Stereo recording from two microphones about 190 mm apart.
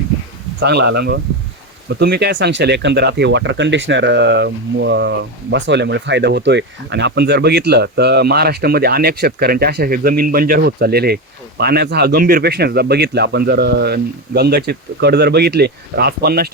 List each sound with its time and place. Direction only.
0.6 s speech: 60° right (ahead or behind)